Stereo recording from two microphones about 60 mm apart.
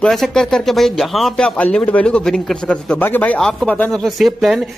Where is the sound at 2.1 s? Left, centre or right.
Centre.